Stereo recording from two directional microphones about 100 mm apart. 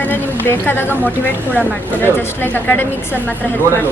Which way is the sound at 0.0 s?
20° left (ahead or behind).